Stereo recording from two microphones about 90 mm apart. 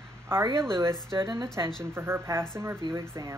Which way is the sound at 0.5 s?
30° right (ahead or behind).